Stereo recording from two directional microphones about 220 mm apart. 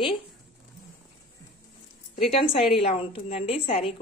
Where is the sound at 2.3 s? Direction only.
25° left (ahead or behind).